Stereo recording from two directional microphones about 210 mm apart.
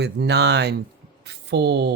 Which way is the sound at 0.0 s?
55° right (ahead or behind).